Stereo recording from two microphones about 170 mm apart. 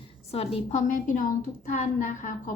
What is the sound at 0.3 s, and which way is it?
A woman's voice, 35° left (ahead or behind).